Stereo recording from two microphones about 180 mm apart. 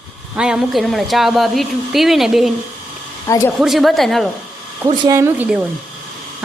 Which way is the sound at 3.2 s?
15° left (ahead or behind).